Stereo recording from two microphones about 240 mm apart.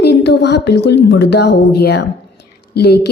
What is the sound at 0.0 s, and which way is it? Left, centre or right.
A woman's voice, left.